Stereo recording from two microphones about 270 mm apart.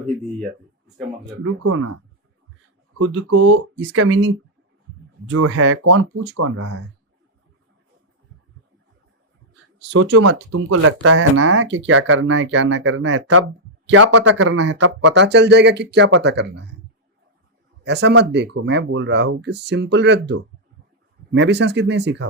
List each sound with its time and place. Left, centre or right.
1.6 s speech: right
3.0 s speech: right
5.3 s speech: right
5.8 s speech: right
6.3 s speech: right
9.7 s speech: right
15.1 s speech: right
17.8 s speech: right